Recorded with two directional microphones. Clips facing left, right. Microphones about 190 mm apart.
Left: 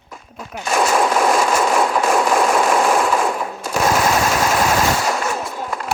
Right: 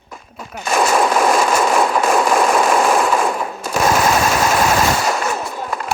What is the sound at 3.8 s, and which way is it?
Machine gun, 75° right (ahead or behind).